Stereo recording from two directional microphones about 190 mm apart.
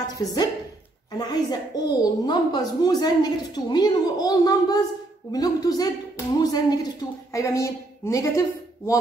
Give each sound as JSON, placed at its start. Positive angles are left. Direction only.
{"t": 0.2, "sound": "a woman's voice", "side_deg": 20}